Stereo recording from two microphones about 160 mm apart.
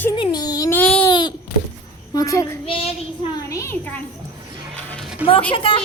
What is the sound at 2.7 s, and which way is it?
Speech, 35° left (ahead or behind).